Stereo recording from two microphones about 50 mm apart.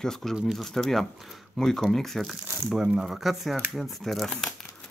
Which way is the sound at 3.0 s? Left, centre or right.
Centre.